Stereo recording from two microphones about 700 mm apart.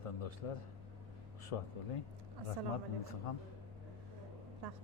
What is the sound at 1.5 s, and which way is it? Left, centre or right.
Speech, left.